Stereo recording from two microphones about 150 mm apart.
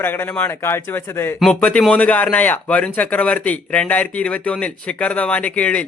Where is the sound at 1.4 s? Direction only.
5° left (ahead or behind).